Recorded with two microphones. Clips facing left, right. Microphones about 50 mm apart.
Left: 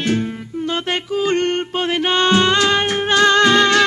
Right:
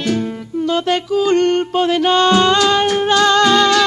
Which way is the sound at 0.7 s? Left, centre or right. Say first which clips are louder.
Right 5 dB; left.